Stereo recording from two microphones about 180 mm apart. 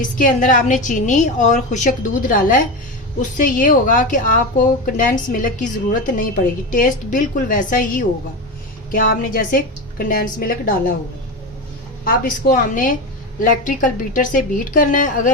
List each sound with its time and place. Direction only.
0.0 s a woman's voice: 45° left (ahead or behind)
12.0 s a woman's voice: 50° left (ahead or behind)